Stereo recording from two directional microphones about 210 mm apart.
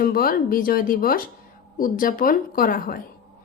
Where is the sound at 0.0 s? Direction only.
45° left (ahead or behind).